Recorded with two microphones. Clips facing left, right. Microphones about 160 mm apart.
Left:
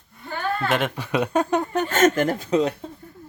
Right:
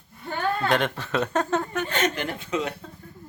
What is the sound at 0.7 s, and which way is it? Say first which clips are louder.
Speech: left 1 dB; 5° left (ahead or behind).